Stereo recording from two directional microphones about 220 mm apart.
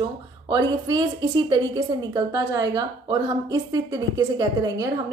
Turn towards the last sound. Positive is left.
turn(degrees=-15)  # may be behind; listen again after turning